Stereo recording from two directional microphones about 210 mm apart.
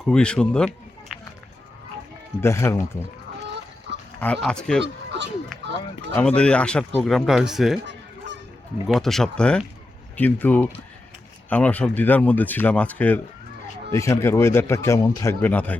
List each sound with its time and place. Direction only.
0.0 s speech: 5° left (ahead or behind)
2.4 s speech: 10° left (ahead or behind)
4.4 s speech: 5° left (ahead or behind)
4.8 s a sound: 60° right (ahead or behind)
5.6 s speech: 55° right (ahead or behind)
6.1 s speech: 5° left (ahead or behind)
8.9 s speech: centre (ahead or behind)